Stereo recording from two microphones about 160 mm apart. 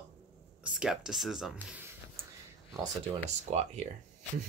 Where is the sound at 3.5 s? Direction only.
45° right (ahead or behind).